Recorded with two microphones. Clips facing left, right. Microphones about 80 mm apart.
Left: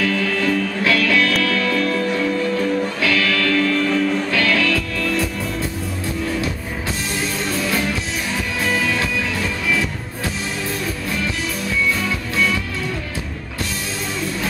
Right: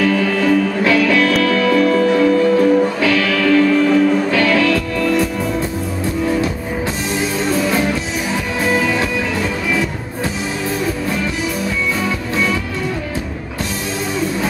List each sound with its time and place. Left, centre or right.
0.0 s music: centre
12.0 s music: centre